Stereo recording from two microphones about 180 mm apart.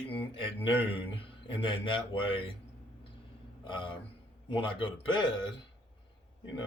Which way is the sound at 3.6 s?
25° left (ahead or behind).